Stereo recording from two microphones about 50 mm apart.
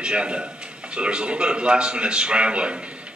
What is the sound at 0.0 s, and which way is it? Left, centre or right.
A man's voice, centre.